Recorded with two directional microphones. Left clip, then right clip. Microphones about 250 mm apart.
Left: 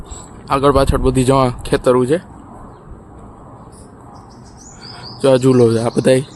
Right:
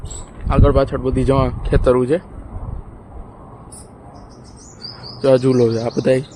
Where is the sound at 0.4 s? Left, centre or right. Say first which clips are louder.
Left 3 dB; centre.